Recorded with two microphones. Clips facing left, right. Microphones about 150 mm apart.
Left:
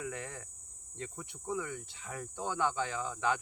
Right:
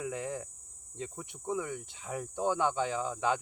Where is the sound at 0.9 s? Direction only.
20° right (ahead or behind).